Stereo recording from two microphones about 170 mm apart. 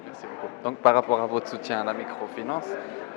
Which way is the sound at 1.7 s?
15° left (ahead or behind).